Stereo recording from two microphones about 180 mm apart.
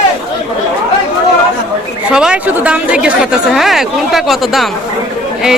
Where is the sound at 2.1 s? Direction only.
5° right (ahead or behind).